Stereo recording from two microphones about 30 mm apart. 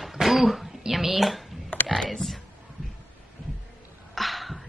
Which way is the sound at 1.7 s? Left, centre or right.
Left.